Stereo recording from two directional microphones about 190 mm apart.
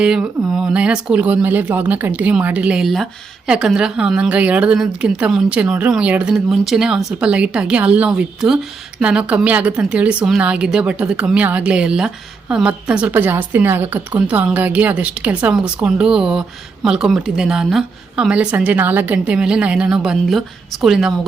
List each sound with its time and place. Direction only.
0.0 s a woman's voice: 5° right (ahead or behind)